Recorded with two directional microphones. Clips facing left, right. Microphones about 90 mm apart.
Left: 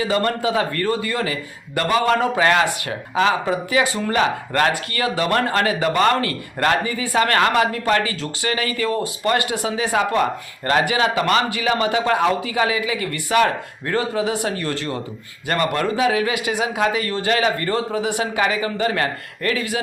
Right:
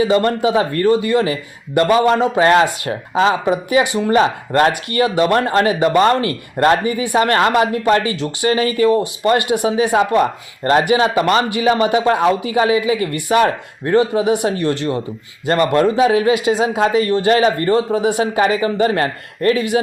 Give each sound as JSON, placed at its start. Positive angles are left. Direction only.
{"t": 0.0, "sound": "speech", "side_deg": -25}